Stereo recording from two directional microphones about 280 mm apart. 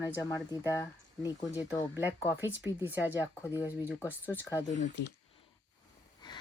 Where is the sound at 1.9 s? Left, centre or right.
Centre.